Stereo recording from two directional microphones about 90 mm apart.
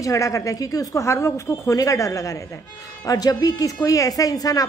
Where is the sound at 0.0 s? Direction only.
40° left (ahead or behind).